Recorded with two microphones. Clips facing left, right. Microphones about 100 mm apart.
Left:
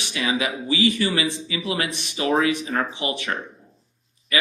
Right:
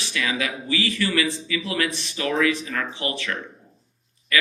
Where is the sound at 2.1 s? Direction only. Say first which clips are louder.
Left 2 dB; 30° left (ahead or behind).